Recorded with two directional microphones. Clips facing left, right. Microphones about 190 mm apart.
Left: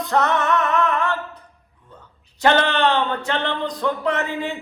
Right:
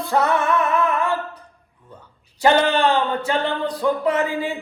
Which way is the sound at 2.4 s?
10° right (ahead or behind).